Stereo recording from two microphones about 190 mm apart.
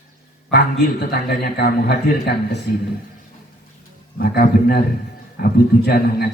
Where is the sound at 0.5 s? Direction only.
60° left (ahead or behind).